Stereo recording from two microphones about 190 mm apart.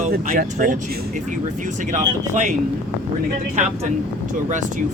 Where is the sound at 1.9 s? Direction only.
40° right (ahead or behind).